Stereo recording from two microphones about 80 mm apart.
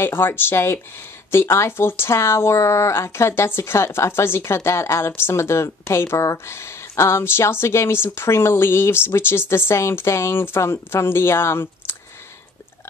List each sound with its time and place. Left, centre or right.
0.0 s speech: left